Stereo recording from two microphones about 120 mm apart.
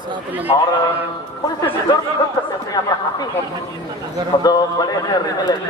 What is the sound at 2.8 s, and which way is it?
Speech, 40° left (ahead or behind).